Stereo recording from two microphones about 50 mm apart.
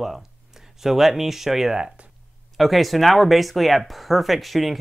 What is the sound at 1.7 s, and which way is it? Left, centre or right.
Speech, right.